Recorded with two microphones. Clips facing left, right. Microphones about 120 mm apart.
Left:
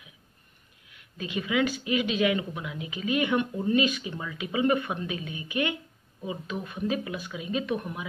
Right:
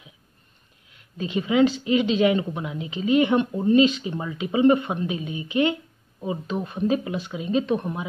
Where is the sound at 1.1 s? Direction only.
30° right (ahead or behind).